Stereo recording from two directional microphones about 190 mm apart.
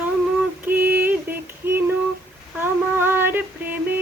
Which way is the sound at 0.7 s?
10° right (ahead or behind).